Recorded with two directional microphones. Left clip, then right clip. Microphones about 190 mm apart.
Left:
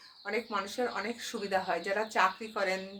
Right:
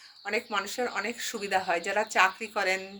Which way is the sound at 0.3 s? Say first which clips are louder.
Right 4 dB; 10° right (ahead or behind).